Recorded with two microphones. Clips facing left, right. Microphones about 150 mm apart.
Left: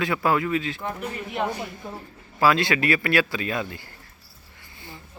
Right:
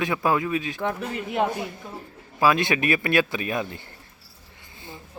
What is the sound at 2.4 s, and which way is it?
A man's voice, 20° right (ahead or behind).